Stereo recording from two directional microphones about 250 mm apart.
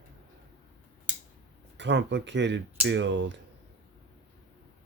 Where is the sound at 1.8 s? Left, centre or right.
Right.